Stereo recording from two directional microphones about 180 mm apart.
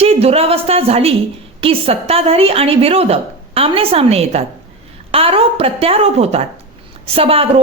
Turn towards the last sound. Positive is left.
turn(degrees=-30)  # may be behind; listen again after turning